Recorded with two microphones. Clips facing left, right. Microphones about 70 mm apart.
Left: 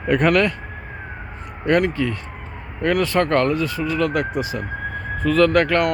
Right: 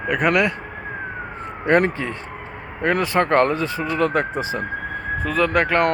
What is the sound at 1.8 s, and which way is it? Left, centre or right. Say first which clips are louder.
Speech: even; right.